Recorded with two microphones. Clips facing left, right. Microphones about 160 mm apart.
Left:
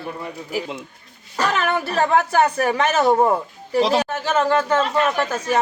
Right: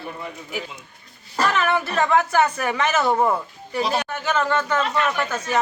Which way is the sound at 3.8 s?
90° left.